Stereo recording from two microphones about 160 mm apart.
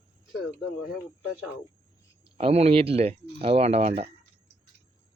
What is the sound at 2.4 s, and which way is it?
Speech, 40° right (ahead or behind).